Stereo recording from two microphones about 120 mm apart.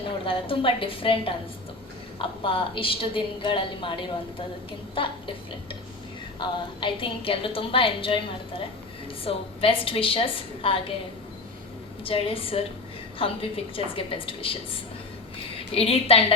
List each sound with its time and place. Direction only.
0.3 s a woman's voice: 45° left (ahead or behind)
6.4 s a woman's voice: 45° left (ahead or behind)
12.0 s a woman's voice: 50° left (ahead or behind)